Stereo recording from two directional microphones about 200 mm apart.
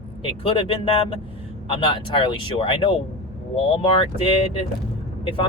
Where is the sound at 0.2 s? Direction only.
25° left (ahead or behind).